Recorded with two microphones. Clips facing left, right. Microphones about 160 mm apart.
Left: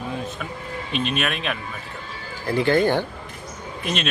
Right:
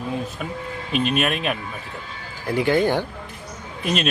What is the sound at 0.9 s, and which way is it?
Speech, centre (ahead or behind).